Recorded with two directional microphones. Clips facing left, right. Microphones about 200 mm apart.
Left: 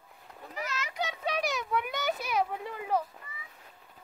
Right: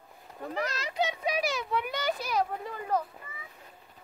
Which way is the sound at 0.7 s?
35° right (ahead or behind).